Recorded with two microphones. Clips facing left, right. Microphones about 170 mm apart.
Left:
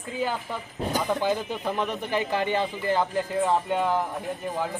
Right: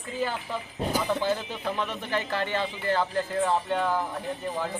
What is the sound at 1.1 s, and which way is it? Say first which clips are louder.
Speech: left 2 dB; 15° left (ahead or behind).